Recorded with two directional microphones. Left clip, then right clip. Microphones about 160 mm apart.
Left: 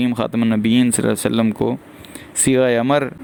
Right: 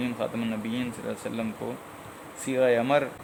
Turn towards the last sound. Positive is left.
turn(degrees=80)